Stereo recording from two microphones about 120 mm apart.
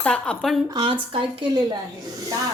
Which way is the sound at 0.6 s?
40° right (ahead or behind).